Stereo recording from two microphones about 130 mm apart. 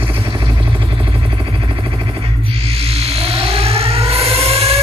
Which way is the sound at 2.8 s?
50° right (ahead or behind).